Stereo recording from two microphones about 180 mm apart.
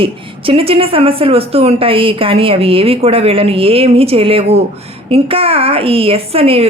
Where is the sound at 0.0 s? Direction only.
30° right (ahead or behind).